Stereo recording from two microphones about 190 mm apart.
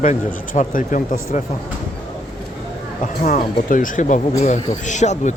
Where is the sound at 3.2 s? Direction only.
45° left (ahead or behind).